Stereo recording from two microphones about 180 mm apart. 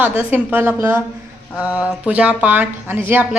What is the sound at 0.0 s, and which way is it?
A woman's voice, 10° right (ahead or behind).